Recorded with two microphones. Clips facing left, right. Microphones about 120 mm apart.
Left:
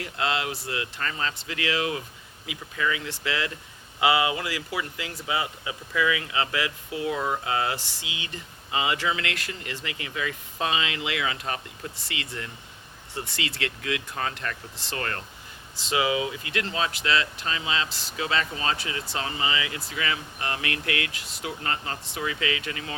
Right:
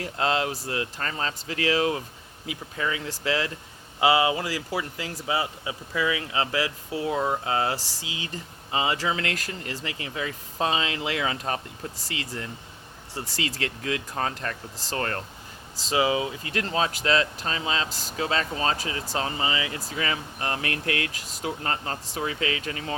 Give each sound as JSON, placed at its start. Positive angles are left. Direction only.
{"t": 0.0, "sound": "speech", "side_deg": -40}